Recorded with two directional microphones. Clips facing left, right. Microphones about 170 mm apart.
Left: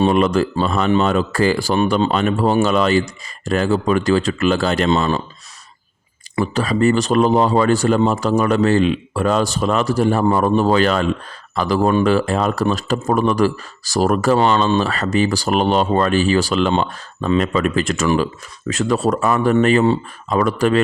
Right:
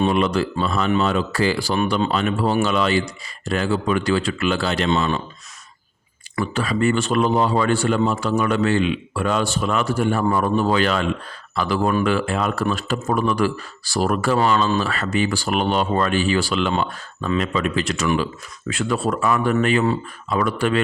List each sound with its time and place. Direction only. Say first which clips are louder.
0.0 s speech: left 4 dB; 40° left (ahead or behind)
6.3 s speech: left 4 dB; 35° left (ahead or behind)
14.3 s speech: left 3 dB; 30° left (ahead or behind)